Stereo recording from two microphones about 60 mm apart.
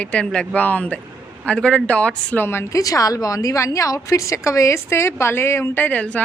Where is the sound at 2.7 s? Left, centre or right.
Left.